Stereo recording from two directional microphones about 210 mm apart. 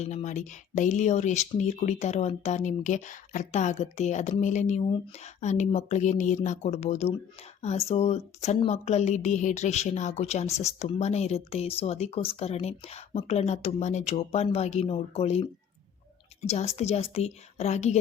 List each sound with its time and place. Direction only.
0.0 s a woman's voice: 35° left (ahead or behind)